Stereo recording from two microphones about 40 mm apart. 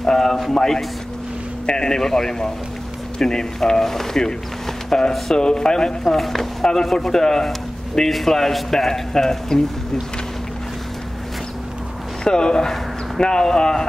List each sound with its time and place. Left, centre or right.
0.0 s a sound: centre
0.5 s a man's voice: centre
6.0 s speech: centre
12.3 s a man's voice: centre